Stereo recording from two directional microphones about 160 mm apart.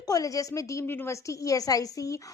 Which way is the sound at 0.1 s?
20° left (ahead or behind).